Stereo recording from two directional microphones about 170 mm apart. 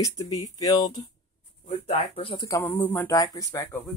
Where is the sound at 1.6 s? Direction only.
40° left (ahead or behind).